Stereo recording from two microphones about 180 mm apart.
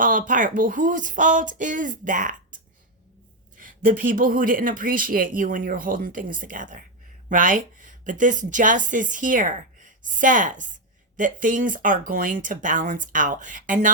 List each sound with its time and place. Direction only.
0.0 s speech: 45° right (ahead or behind)
3.6 s speech: 50° right (ahead or behind)